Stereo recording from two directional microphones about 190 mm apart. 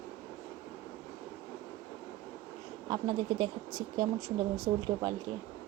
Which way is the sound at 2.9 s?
25° right (ahead or behind).